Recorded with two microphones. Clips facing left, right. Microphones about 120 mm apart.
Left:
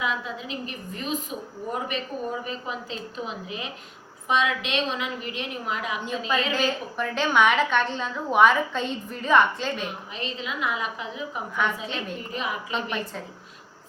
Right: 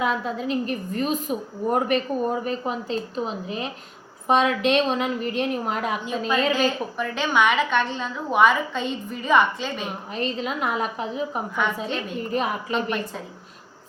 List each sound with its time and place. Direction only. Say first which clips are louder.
0.0 s a woman's voice: right 5 dB; 45° right (ahead or behind)
6.1 s a woman's voice: right 3 dB; centre (ahead or behind)
10.2 s a woman's voice: right 6 dB; 45° right (ahead or behind)
11.9 s a woman's voice: right 4 dB; centre (ahead or behind)
12.3 s a woman's voice: right 7 dB; 45° right (ahead or behind)
12.7 s a woman's voice: right 4 dB; centre (ahead or behind)